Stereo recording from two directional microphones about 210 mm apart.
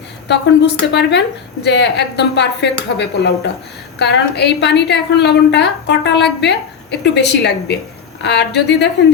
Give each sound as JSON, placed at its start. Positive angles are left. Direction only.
{"t": 0.3, "sound": "a woman's voice", "side_deg": 55}